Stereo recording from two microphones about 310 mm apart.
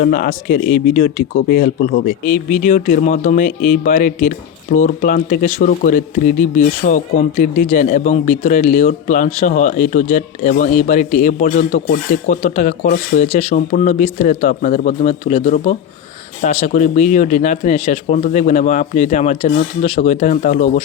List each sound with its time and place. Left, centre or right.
0.0 s speech: left